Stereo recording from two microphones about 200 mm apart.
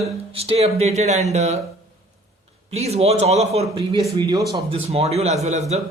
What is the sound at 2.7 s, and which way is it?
Speech, 30° right (ahead or behind).